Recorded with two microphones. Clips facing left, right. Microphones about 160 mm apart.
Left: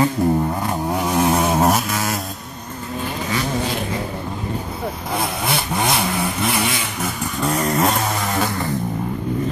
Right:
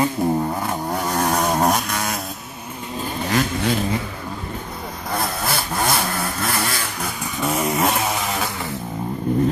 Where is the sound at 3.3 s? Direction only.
60° right (ahead or behind).